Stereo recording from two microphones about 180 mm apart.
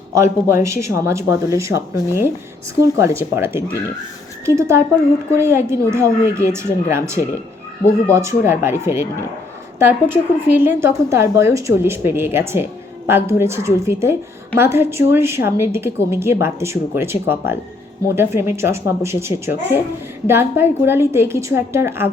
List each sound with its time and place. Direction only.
0.1 s a woman's voice: 15° right (ahead or behind)
3.0 s a woman's voice: 15° right (ahead or behind)